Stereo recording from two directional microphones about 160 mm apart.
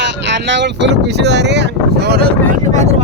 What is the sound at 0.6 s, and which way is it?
Speech, 90° right.